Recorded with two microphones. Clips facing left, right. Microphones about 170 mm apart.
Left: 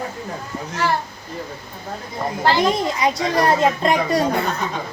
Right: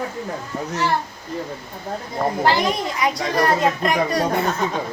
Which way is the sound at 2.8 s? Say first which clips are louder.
Left 2 dB; 25° left (ahead or behind).